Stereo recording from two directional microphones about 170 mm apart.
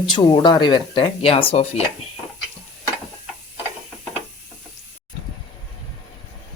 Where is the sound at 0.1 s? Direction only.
25° left (ahead or behind).